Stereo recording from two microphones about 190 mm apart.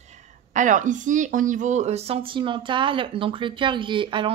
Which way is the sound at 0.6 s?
40° right (ahead or behind).